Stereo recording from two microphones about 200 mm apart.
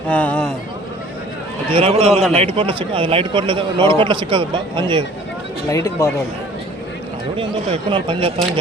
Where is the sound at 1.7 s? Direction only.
30° right (ahead or behind).